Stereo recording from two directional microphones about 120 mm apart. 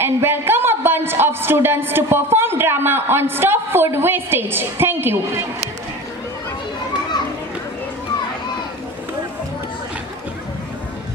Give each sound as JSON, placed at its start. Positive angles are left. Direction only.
{"t": 0.0, "sound": "a woman's voice", "side_deg": -20}